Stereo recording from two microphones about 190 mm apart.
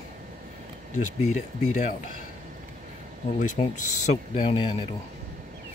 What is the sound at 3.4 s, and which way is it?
Speech, 40° left (ahead or behind).